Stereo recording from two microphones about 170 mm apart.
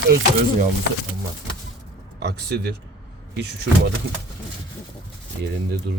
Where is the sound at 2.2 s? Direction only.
80° right.